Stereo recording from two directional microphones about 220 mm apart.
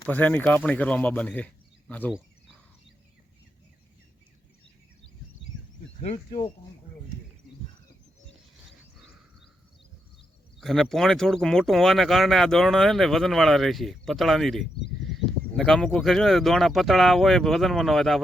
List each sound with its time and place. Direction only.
0.0 s speech: 5° left (ahead or behind)
6.0 s speech: 25° left (ahead or behind)
10.6 s speech: centre (ahead or behind)